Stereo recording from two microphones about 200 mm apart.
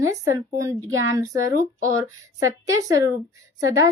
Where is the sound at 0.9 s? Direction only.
85° right.